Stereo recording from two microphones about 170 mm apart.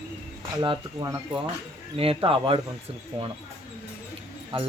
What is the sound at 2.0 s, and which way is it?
Speech, 35° right (ahead or behind).